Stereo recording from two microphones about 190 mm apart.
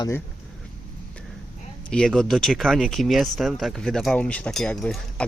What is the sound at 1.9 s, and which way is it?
Speech, 5° left (ahead or behind).